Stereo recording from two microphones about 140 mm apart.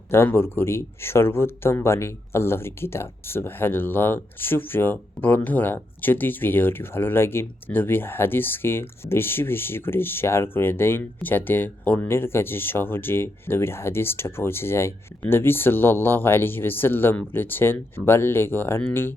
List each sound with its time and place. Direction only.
0.1 s speech: 15° left (ahead or behind)